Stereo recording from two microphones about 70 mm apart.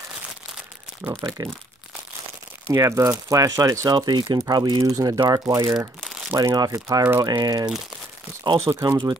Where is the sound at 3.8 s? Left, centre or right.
Right.